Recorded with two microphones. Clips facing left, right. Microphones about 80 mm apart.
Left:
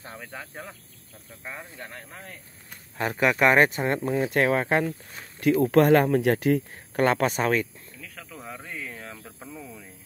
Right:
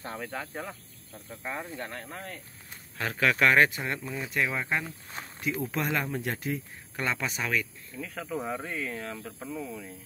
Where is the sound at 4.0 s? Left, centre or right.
Left.